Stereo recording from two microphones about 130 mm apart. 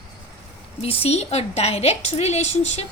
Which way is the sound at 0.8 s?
50° left (ahead or behind).